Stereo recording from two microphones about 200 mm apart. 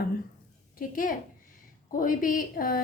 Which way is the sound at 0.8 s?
45° left (ahead or behind).